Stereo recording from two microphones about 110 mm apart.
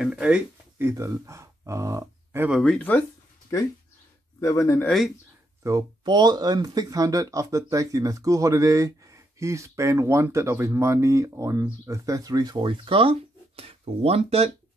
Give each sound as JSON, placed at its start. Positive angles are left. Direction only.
{"t": 0.0, "sound": "speech", "side_deg": -5}
{"t": 0.7, "sound": "speech", "side_deg": -25}
{"t": 2.6, "sound": "speech", "side_deg": 10}
{"t": 4.4, "sound": "speech", "side_deg": 30}
{"t": 5.6, "sound": "speech", "side_deg": -30}
{"t": 6.0, "sound": "speech", "side_deg": -40}